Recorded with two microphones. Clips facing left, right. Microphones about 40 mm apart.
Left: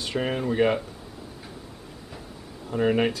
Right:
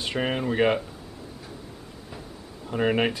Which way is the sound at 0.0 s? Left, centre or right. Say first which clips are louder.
Even; centre.